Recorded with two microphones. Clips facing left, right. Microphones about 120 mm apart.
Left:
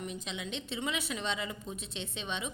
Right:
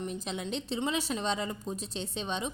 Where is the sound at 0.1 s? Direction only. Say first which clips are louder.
Right 4 dB; 40° right (ahead or behind).